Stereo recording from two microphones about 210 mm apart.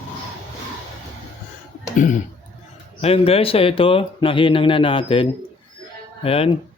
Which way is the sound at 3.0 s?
30° left (ahead or behind).